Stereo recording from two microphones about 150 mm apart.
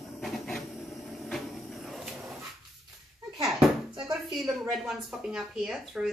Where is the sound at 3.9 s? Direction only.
25° right (ahead or behind).